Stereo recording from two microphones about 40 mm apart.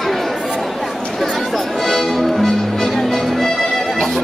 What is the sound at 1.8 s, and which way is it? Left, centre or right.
Music, centre.